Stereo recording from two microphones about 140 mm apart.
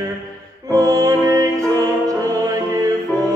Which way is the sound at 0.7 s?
25° right (ahead or behind).